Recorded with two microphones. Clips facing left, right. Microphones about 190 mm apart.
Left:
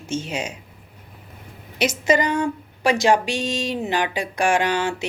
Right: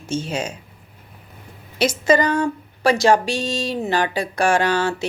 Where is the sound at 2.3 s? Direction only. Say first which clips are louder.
Right 2 dB; 40° right (ahead or behind).